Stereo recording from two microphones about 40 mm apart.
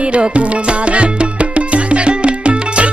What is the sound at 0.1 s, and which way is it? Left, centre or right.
Music, right.